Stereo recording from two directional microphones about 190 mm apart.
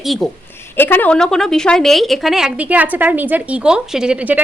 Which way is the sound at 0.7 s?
10° left (ahead or behind).